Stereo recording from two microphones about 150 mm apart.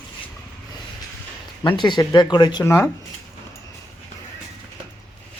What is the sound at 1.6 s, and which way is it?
Speech, 30° left (ahead or behind).